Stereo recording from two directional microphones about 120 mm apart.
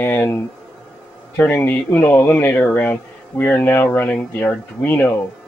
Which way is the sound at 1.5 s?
15° left (ahead or behind).